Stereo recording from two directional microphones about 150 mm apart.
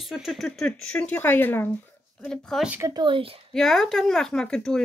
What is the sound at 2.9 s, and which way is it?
Speech, 35° right (ahead or behind).